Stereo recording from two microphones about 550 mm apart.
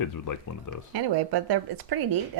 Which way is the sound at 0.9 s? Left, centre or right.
Right.